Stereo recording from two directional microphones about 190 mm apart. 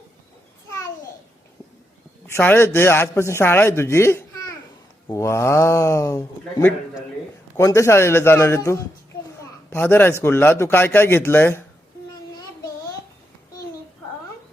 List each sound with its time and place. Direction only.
2.2 s speech: 10° left (ahead or behind)